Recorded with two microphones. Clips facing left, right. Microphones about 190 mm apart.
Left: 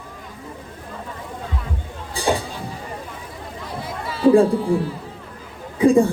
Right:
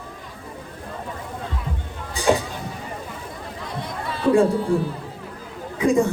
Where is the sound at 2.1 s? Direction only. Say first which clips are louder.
Right 2 dB; 30° left (ahead or behind).